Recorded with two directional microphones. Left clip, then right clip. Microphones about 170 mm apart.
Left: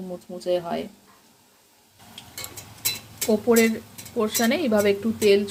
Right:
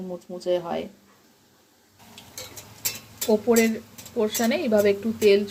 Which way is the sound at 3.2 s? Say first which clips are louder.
Left 1 dB; centre (ahead or behind).